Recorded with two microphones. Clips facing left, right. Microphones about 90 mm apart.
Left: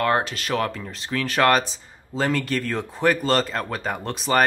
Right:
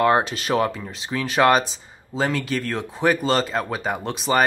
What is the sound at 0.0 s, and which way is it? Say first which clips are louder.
Speech: right 3 dB; 20° right (ahead or behind).